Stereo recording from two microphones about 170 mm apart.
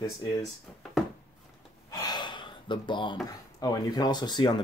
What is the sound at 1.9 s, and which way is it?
Speech, 20° left (ahead or behind).